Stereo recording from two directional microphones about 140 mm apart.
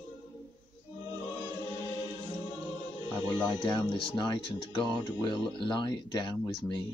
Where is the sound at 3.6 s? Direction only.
35° left (ahead or behind).